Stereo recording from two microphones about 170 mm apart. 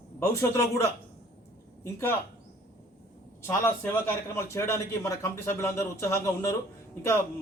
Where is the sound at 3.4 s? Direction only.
15° left (ahead or behind).